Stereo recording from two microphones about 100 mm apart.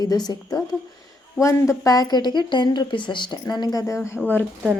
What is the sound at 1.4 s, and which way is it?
Speech, 30° left (ahead or behind).